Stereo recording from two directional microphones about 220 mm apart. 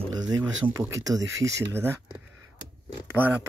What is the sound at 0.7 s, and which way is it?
Speech, 15° right (ahead or behind).